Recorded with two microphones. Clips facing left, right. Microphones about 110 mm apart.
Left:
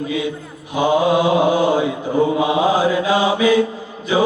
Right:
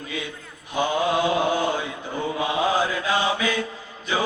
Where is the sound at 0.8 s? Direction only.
20° left (ahead or behind).